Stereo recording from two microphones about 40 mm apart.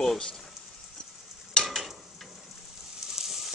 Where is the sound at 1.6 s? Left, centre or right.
Left.